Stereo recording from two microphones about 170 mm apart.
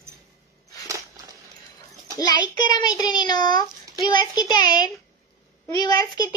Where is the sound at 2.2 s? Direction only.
25° left (ahead or behind).